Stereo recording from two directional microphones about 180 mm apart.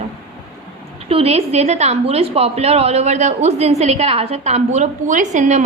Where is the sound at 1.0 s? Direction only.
35° right (ahead or behind).